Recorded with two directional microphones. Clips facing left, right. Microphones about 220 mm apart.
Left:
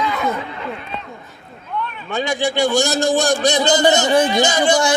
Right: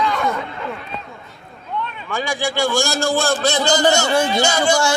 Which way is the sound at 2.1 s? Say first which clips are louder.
Left 3 dB; 20° left (ahead or behind).